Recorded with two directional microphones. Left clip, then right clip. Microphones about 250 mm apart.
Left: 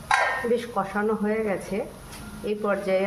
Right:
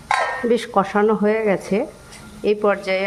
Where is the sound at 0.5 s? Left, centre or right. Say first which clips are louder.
Right 7 dB; right.